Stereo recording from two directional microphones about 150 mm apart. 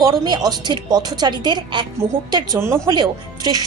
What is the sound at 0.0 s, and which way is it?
A woman's voice, 25° right (ahead or behind).